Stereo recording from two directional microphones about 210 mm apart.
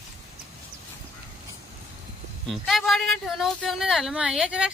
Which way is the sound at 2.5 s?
Centre (ahead or behind).